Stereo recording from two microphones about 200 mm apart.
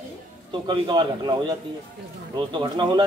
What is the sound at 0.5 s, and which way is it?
A man's voice, 25° right (ahead or behind).